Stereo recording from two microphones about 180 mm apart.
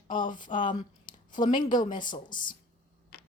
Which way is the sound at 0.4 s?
45° left (ahead or behind).